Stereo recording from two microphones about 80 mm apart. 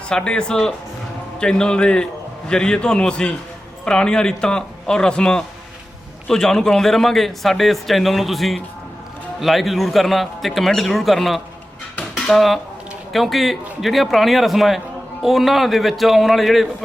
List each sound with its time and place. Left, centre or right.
0.1 s a man's voice: centre
11.9 s dishes: centre
12.3 s a man's voice: centre